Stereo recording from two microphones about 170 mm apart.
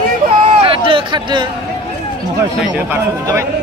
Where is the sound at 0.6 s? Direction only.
30° right (ahead or behind).